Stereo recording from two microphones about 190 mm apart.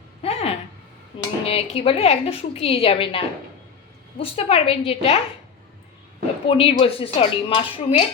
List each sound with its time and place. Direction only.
0.2 s a sound: 30° left (ahead or behind)
1.1 s dishes: 25° left (ahead or behind)
1.5 s a woman's voice: 30° left (ahead or behind)
6.5 s speech: 30° left (ahead or behind)